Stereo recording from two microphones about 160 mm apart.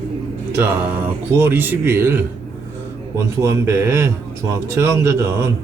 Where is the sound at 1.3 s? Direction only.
15° right (ahead or behind).